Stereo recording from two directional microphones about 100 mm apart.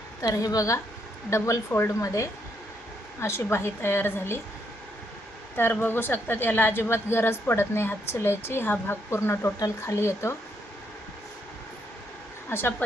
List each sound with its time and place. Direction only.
0.2 s a woman's voice: 35° left (ahead or behind)
5.5 s a woman's voice: 20° left (ahead or behind)
12.5 s speech: 25° left (ahead or behind)